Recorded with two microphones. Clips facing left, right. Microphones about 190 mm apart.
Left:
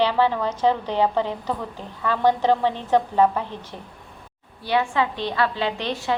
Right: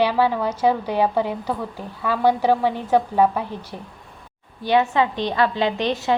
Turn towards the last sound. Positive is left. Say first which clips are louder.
# right 4 dB
turn(degrees=-20)  # may be behind; listen again after turning